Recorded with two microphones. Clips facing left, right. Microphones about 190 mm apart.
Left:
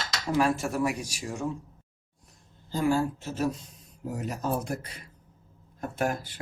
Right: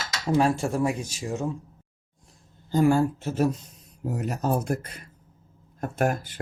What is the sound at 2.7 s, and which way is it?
Speech, 55° right (ahead or behind).